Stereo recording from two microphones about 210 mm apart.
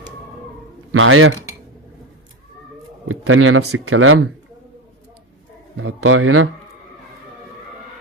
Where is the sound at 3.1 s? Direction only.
80° right.